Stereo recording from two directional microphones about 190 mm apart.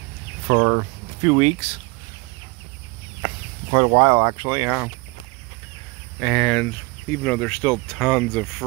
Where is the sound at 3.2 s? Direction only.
25° right (ahead or behind).